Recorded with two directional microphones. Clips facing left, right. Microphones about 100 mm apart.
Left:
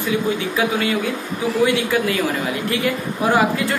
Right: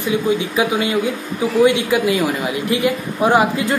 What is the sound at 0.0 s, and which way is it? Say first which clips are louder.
Speech: right 2 dB; 20° right (ahead or behind).